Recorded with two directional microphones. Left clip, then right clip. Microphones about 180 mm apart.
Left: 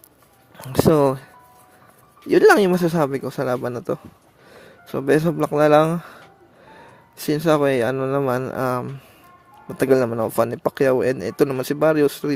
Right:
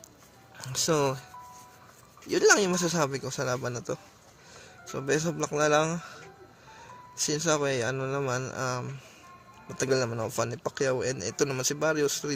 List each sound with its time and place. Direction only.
0.7 s a man's voice: 45° left (ahead or behind)